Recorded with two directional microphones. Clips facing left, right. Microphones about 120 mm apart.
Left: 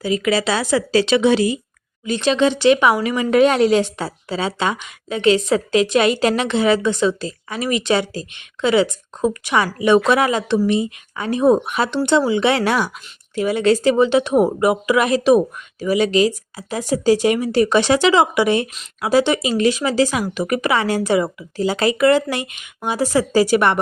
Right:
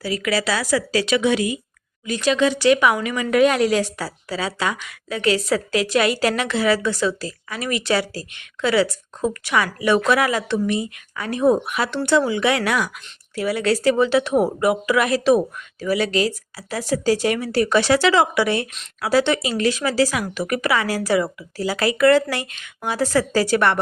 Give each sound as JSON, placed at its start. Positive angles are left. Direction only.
{"t": 0.0, "sound": "speech", "side_deg": 20}